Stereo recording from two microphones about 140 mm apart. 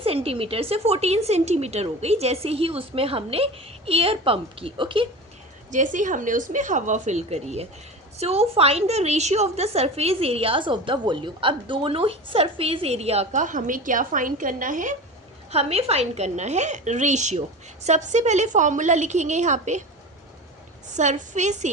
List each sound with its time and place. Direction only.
0.0 s a woman's voice: 45° right (ahead or behind)
5.7 s a woman's voice: 65° right (ahead or behind)
15.5 s a woman's voice: 45° right (ahead or behind)
20.9 s a woman's voice: 60° right (ahead or behind)